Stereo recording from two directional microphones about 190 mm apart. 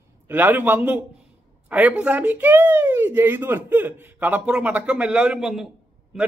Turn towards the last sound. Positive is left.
turn(degrees=0)  # may be behind; listen again after turning